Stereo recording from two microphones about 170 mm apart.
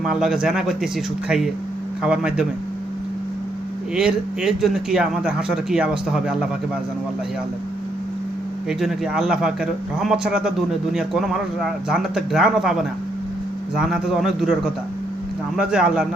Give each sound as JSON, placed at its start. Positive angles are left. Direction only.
{"t": 0.0, "sound": "speech", "side_deg": -5}
{"t": 2.0, "sound": "speech", "side_deg": -5}
{"t": 3.9, "sound": "speech", "side_deg": -5}
{"t": 8.8, "sound": "speech", "side_deg": -5}
{"t": 13.7, "sound": "speech", "side_deg": -5}